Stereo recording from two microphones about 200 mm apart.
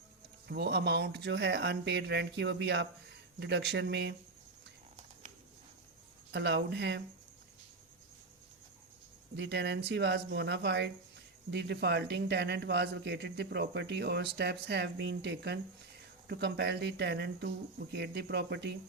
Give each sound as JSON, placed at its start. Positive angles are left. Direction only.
{"t": 0.4, "sound": "speech", "side_deg": -55}
{"t": 6.3, "sound": "speech", "side_deg": -55}
{"t": 9.3, "sound": "speech", "side_deg": -55}